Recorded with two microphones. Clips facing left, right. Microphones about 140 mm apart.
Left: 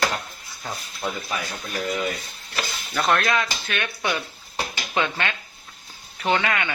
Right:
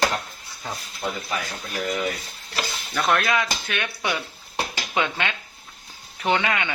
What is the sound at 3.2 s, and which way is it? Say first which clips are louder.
Speech: even; 15° right (ahead or behind).